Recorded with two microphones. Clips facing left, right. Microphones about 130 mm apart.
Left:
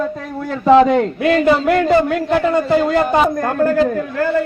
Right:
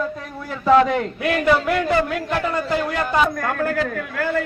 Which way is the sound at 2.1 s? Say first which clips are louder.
Left 7 dB; 40° left (ahead or behind).